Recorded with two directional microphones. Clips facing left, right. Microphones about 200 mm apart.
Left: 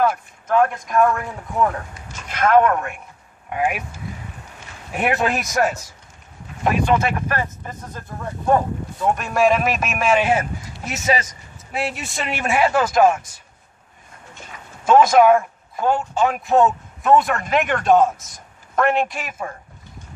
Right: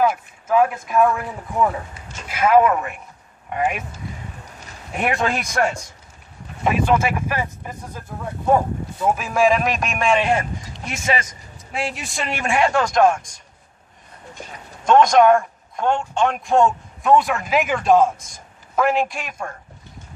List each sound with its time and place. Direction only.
0.0 s a man's voice: 5° right (ahead or behind)
14.9 s a man's voice: 5° left (ahead or behind)